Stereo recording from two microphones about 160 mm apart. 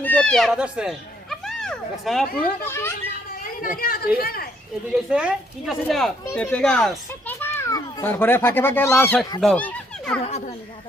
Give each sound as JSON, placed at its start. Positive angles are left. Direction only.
{"t": 0.0, "sound": "a sound", "side_deg": 10}
{"t": 2.6, "sound": "a child's voice", "side_deg": 15}
{"t": 3.6, "sound": "a woman's voice", "side_deg": 60}
{"t": 4.9, "sound": "speech", "side_deg": -5}
{"t": 7.3, "sound": "a child's voice", "side_deg": 15}
{"t": 9.4, "sound": "a sound", "side_deg": 5}
{"t": 10.2, "sound": "speech", "side_deg": 40}